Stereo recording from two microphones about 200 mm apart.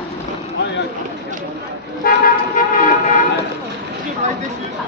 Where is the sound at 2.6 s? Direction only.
40° left (ahead or behind).